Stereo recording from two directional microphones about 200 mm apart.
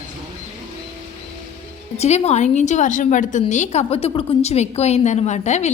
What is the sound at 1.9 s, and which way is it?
A woman's voice, 30° left (ahead or behind).